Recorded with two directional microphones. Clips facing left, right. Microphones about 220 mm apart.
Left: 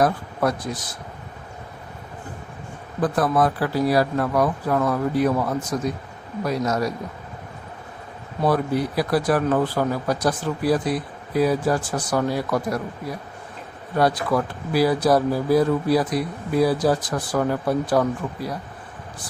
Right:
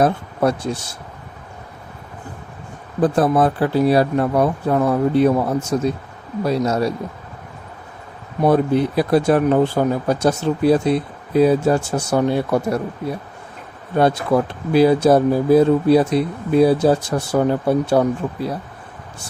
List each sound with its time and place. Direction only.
0.0 s speech: 25° right (ahead or behind)
3.0 s speech: 30° right (ahead or behind)
8.4 s speech: 25° right (ahead or behind)